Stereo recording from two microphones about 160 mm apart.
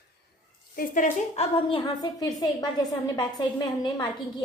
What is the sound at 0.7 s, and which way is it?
Speech, 60° left (ahead or behind).